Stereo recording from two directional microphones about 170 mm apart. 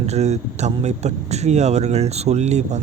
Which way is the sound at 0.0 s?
40° right (ahead or behind).